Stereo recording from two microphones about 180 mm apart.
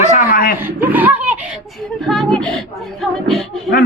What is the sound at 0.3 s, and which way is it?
Chuckle, 55° left (ahead or behind).